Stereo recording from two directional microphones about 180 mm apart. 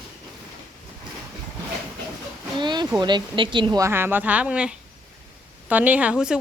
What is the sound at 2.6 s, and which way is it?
A woman's voice, 25° right (ahead or behind).